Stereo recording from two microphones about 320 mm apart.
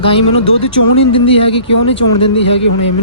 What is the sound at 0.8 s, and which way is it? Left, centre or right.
Speech, left.